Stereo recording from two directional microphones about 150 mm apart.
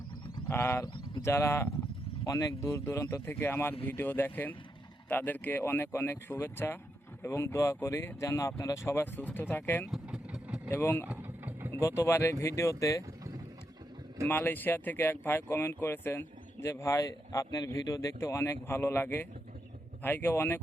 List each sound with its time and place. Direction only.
0.4 s speech: 15° left (ahead or behind)
9.9 s vehicle: 5° right (ahead or behind)
10.7 s speech: 15° left (ahead or behind)
11.1 s vehicle: 15° right (ahead or behind)
11.7 s speech: 15° left (ahead or behind)
14.3 s speech: 15° left (ahead or behind)